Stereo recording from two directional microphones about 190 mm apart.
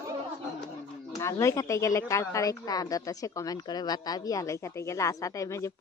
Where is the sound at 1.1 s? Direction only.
15° left (ahead or behind).